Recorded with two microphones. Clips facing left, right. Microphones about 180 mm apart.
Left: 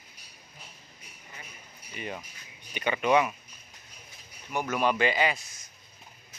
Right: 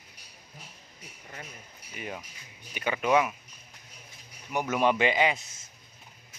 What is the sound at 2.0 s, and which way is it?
Speech, 5° right (ahead or behind).